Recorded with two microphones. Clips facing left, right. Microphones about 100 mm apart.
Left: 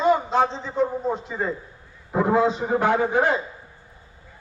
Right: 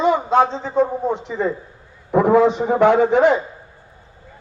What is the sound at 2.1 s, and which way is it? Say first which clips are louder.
A man's voice: right 6 dB; 65° right (ahead or behind).